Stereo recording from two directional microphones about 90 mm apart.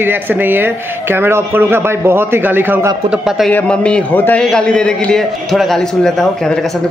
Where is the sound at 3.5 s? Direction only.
10° left (ahead or behind).